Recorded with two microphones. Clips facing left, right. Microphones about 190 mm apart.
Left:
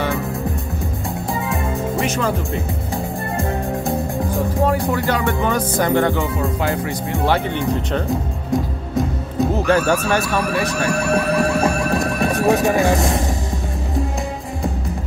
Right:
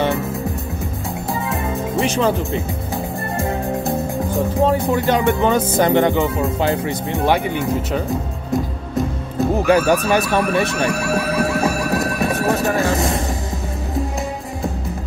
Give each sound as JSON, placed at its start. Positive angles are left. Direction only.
{"t": 2.0, "sound": "speech", "side_deg": -30}
{"t": 4.9, "sound": "speech", "side_deg": -20}
{"t": 7.5, "sound": "speech", "side_deg": -5}
{"t": 8.9, "sound": "music", "side_deg": 0}
{"t": 10.3, "sound": "speech", "side_deg": 0}
{"t": 10.7, "sound": "music", "side_deg": 0}
{"t": 12.6, "sound": "speech", "side_deg": 15}
{"t": 12.9, "sound": "speech", "side_deg": 0}